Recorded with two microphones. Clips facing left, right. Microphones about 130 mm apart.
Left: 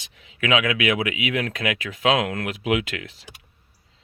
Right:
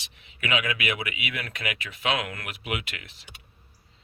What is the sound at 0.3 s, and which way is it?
Speech, 90° left.